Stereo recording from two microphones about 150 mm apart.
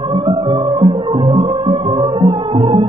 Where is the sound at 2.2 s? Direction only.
40° right (ahead or behind).